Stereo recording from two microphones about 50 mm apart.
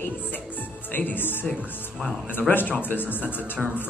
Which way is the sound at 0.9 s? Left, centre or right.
Left.